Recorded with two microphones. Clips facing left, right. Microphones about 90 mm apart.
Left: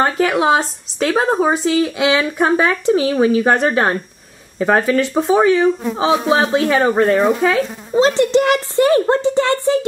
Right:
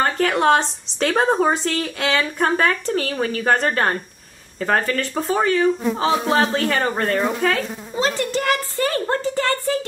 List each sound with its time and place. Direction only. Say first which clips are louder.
0.0 s speech: left 3 dB; 5° left (ahead or behind)
7.9 s a woman's voice: left 9 dB; 25° left (ahead or behind)